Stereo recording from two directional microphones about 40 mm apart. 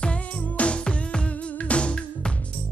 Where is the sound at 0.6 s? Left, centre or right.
Left.